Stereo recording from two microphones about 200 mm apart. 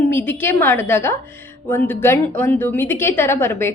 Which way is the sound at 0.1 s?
10° left (ahead or behind).